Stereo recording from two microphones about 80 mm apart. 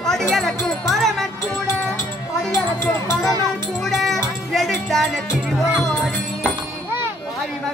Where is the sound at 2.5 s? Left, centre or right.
Left.